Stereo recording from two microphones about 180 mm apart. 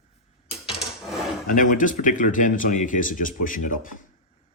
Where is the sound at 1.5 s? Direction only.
45° left (ahead or behind).